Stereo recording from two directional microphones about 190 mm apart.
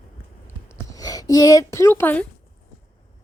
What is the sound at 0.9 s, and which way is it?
Speech, 20° left (ahead or behind).